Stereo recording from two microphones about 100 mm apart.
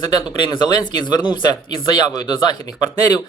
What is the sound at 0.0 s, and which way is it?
Speech, 50° left (ahead or behind).